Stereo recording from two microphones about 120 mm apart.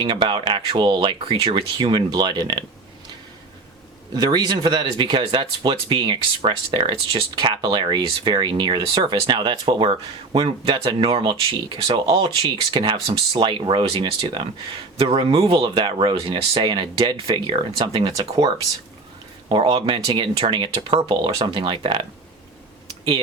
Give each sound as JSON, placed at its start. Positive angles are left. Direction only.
{"t": 0.0, "sound": "speech", "side_deg": -40}
{"t": 4.1, "sound": "speech", "side_deg": -35}
{"t": 18.1, "sound": "speech", "side_deg": -30}
{"t": 19.5, "sound": "speech", "side_deg": -45}